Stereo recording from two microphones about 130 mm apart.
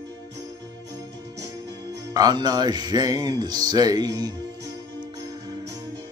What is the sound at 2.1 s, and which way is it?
Music, 30° right (ahead or behind).